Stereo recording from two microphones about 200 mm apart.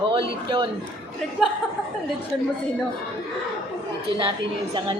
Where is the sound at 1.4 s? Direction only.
Centre (ahead or behind).